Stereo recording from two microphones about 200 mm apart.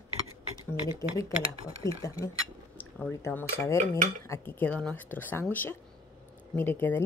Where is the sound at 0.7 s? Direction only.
15° left (ahead or behind).